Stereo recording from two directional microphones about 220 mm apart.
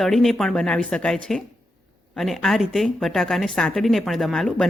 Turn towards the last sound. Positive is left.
turn(degrees=0)  # may be behind; listen again after turning